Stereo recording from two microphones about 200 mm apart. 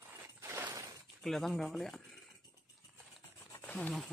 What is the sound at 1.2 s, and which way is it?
Speech, centre (ahead or behind).